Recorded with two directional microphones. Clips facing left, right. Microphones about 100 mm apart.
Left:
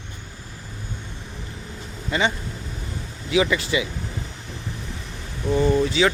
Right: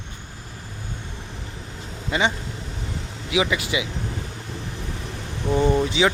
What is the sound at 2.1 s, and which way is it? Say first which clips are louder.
Speech: even; 15° right (ahead or behind).